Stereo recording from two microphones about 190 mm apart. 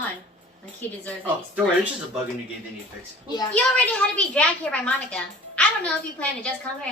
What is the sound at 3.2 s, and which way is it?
Speech, 20° left (ahead or behind).